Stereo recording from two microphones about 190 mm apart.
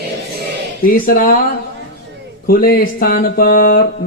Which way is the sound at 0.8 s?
50° left (ahead or behind).